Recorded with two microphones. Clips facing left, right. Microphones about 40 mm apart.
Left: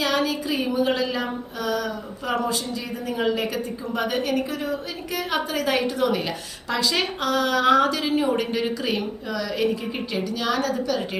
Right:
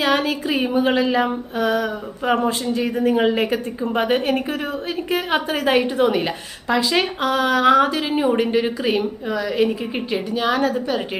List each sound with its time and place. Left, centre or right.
0.0 s female singing: right